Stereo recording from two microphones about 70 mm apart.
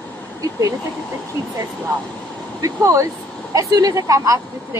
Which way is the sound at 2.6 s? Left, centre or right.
Right.